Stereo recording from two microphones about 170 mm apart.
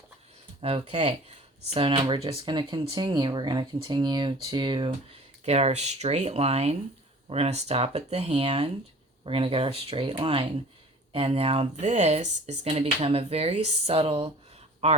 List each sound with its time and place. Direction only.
0.6 s speech: 35° right (ahead or behind)
5.5 s speech: 40° right (ahead or behind)